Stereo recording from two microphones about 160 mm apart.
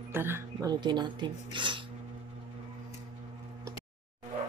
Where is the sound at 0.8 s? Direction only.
30° right (ahead or behind).